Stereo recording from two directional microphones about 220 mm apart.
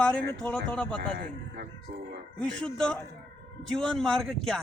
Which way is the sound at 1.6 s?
50° right (ahead or behind).